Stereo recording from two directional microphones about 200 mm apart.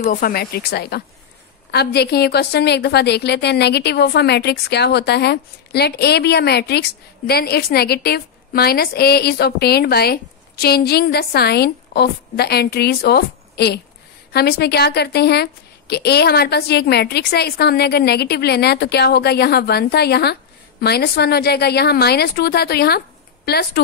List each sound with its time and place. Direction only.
0.0 s a woman's voice: 45° left (ahead or behind)